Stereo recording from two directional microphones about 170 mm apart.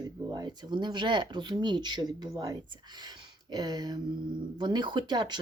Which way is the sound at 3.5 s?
25° right (ahead or behind).